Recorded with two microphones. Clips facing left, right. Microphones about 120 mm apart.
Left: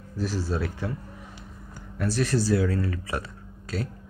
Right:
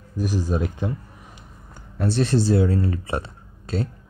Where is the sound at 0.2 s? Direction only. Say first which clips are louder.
Right 4 dB; 15° right (ahead or behind).